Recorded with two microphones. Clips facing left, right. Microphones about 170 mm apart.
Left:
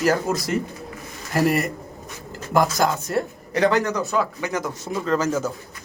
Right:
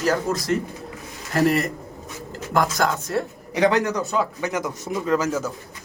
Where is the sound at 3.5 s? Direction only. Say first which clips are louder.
Even; 15° right (ahead or behind).